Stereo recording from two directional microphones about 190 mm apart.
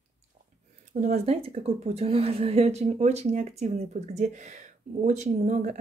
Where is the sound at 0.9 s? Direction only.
40° right (ahead or behind).